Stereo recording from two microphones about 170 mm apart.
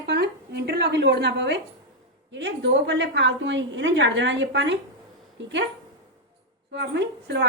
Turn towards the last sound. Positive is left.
turn(degrees=-80)